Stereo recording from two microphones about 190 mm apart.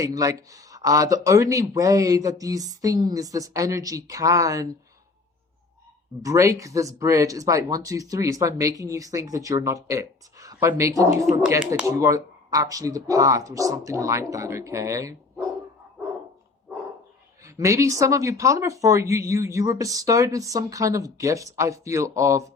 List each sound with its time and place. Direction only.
0.0 s speech: 15° right (ahead or behind)
6.2 s speech: 15° right (ahead or behind)
17.4 s speech: 15° right (ahead or behind)